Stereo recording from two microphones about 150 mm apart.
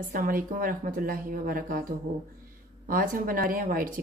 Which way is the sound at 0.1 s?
70° right (ahead or behind).